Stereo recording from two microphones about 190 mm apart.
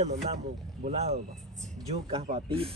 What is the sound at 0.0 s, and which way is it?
Speech, 35° right (ahead or behind).